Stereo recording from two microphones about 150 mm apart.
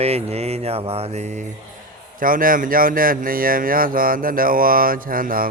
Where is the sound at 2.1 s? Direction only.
65° right (ahead or behind).